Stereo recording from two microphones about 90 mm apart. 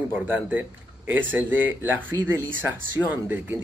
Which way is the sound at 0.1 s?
20° right (ahead or behind).